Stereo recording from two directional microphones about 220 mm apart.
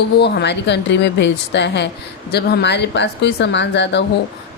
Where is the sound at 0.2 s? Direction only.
50° left (ahead or behind).